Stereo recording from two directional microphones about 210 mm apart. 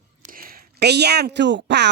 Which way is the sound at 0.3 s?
45° right (ahead or behind).